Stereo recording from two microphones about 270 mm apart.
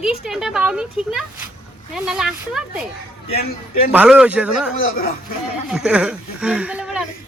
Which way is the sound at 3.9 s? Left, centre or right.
Centre.